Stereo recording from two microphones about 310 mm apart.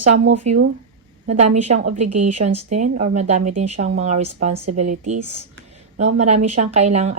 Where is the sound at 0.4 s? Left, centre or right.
Right.